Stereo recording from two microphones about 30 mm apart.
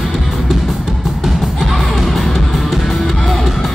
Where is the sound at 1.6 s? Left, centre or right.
Centre.